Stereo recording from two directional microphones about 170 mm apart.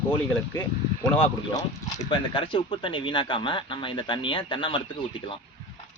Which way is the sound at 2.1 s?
30° left (ahead or behind).